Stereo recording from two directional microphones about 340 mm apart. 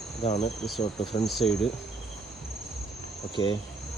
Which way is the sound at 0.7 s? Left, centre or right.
Centre.